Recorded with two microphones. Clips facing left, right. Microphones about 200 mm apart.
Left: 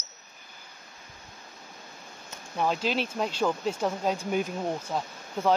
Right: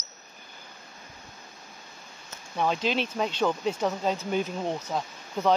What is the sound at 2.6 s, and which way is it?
Speech, 5° left (ahead or behind).